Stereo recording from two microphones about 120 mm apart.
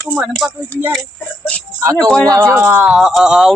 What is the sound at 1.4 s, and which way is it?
Music, 10° left (ahead or behind).